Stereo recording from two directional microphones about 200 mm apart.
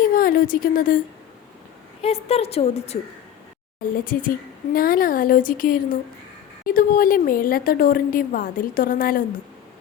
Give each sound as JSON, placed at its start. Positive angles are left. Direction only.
{"t": 0.0, "sound": "a woman's voice", "side_deg": 45}
{"t": 2.0, "sound": "a woman's voice", "side_deg": 30}
{"t": 4.0, "sound": "a woman's voice", "side_deg": 45}